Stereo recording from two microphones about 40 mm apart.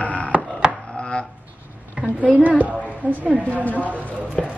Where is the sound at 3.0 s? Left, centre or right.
Right.